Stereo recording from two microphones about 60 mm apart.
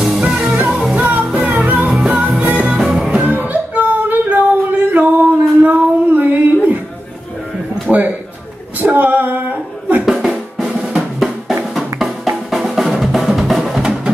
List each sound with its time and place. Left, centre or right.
0.2 s music: centre
1.9 s music: centre
2.3 s music: centre
2.8 s music: centre
3.2 s singing: right
5.6 s female singing: right
7.9 s a sound: centre
8.7 s a sound: right
10.0 s drum: centre